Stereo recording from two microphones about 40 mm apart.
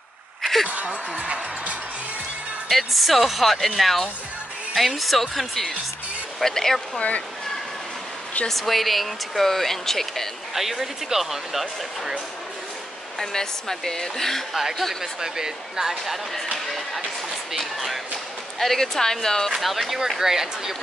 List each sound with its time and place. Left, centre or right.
0.4 s a sound: centre
0.8 s speech: right
2.7 s speech: centre
7.0 s speech: left
8.5 s speech: centre
10.5 s speech: centre
13.2 s speech: centre
14.5 s speech: centre
15.1 s speech: centre
16.5 s speech: centre
19.6 s speech: centre